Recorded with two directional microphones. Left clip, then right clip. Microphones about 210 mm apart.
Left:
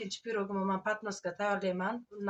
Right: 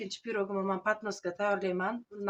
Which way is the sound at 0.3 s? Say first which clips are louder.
Right 2 dB; 40° right (ahead or behind).